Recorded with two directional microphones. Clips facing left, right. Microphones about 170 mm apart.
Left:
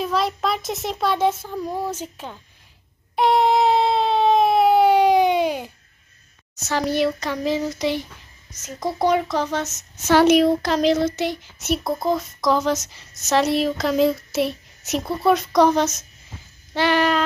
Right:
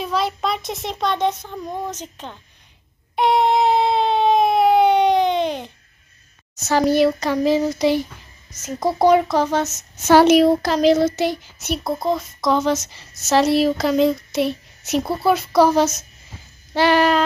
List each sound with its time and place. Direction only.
0.0 s a woman's voice: centre (ahead or behind)
3.2 s a sound: centre (ahead or behind)
6.9 s speech: 40° right (ahead or behind)
10.7 s a woman's voice: 5° right (ahead or behind)
16.7 s speech: 35° right (ahead or behind)